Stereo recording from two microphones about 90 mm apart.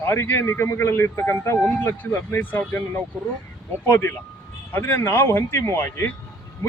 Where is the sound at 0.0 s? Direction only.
25° left (ahead or behind).